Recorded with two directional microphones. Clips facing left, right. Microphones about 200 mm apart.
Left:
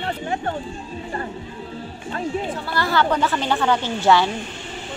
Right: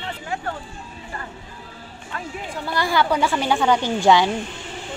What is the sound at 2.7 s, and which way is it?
A woman's voice, 10° right (ahead or behind).